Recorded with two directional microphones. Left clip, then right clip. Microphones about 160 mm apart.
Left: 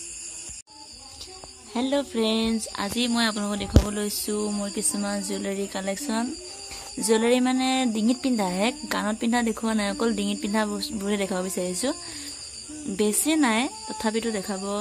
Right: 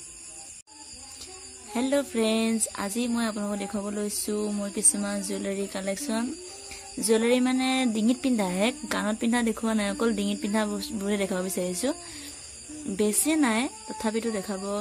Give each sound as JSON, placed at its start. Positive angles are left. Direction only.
{"t": 1.7, "sound": "speech", "side_deg": -15}